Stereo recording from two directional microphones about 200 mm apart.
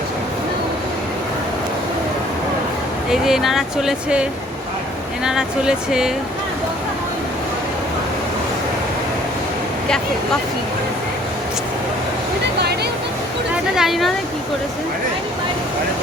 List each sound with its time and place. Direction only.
3.1 s speech: centre (ahead or behind)
12.5 s a sound: 55° right (ahead or behind)
13.7 s speech: centre (ahead or behind)